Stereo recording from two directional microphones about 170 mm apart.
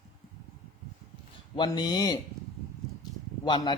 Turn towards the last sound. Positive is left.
turn(degrees=25)  # may be behind; listen again after turning